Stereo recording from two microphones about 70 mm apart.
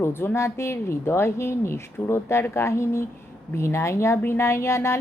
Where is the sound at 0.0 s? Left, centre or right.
Left.